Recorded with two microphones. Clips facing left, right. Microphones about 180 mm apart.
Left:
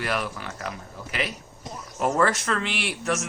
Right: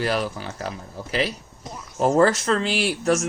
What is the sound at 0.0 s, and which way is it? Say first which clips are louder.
Speech: right 4 dB; 30° right (ahead or behind).